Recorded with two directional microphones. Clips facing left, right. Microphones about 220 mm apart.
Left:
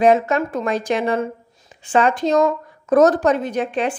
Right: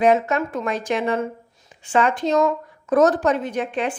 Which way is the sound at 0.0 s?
35° left (ahead or behind).